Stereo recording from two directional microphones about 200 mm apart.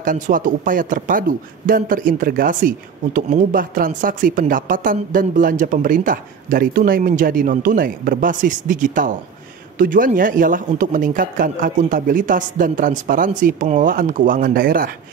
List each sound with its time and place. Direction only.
0.0 s speech: 40° right (ahead or behind)